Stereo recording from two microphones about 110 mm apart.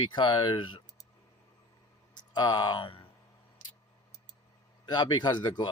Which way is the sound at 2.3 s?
40° left (ahead or behind).